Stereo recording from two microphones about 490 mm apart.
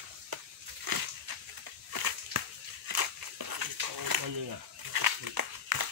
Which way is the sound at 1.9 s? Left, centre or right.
Right.